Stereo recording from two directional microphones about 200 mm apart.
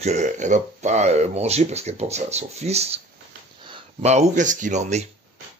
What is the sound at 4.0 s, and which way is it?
A man's voice, 35° right (ahead or behind).